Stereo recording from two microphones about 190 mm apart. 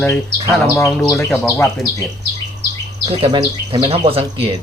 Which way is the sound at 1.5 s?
15° left (ahead or behind).